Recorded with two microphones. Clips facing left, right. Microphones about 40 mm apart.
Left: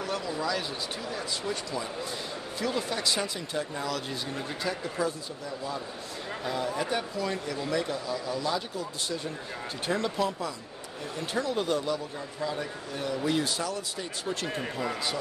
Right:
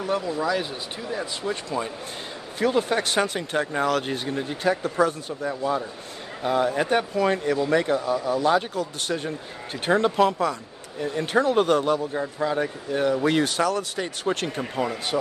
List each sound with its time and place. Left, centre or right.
0.0 s a man's voice: centre; by 10.5 s right
11.1 s a man's voice: right